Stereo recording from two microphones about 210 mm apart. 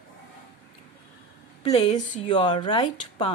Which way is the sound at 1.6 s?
25° left (ahead or behind).